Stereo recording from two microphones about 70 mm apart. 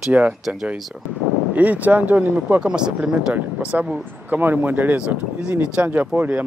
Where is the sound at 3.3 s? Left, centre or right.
Right.